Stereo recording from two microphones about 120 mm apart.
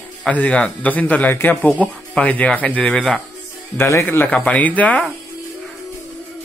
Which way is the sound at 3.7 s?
20° left (ahead or behind).